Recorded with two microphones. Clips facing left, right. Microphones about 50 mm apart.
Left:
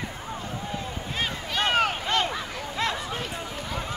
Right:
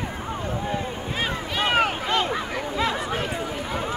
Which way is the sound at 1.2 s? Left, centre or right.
Centre.